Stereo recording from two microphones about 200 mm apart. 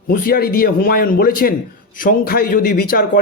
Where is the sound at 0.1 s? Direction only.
50° left (ahead or behind).